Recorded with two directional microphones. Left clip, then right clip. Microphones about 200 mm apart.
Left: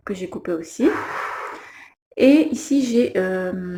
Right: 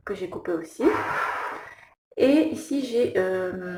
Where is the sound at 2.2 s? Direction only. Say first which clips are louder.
Left 5 dB; 35° left (ahead or behind).